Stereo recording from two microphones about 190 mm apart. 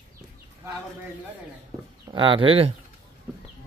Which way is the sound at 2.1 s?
25° right (ahead or behind).